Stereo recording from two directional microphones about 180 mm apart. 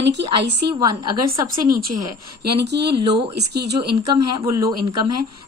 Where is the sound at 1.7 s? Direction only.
55° right (ahead or behind).